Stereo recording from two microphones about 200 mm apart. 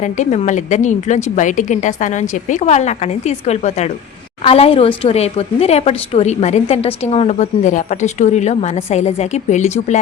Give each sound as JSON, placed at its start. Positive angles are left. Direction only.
{"t": 0.0, "sound": "a woman's voice", "side_deg": 35}